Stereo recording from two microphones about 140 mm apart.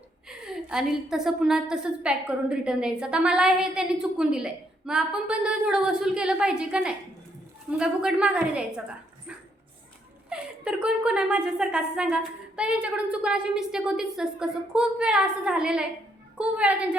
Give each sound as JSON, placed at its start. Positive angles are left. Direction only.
{"t": 0.3, "sound": "a woman's voice", "side_deg": -5}
{"t": 10.2, "sound": "a woman's voice", "side_deg": -5}